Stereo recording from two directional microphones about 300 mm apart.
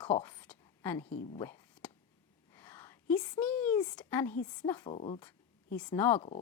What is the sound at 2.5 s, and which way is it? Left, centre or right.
A woman's voice, centre.